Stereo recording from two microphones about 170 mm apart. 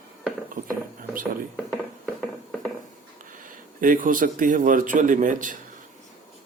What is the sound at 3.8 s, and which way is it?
Speech, 55° right (ahead or behind).